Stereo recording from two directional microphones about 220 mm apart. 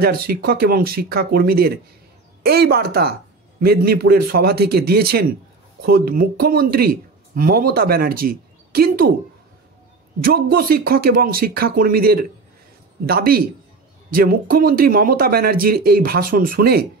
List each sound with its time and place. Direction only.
0.0 s speech: 45° right (ahead or behind)
10.2 s speech: 45° right (ahead or behind)